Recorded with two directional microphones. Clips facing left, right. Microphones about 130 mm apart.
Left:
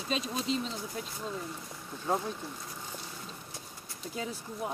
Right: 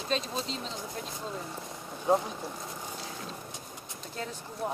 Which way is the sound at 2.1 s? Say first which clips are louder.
Right 5 dB; 20° right (ahead or behind).